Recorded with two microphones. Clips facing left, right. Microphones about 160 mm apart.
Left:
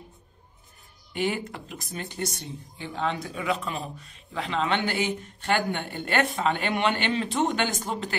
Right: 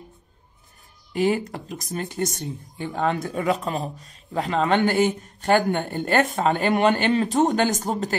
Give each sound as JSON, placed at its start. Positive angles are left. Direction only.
{"t": 1.1, "sound": "speech", "side_deg": -40}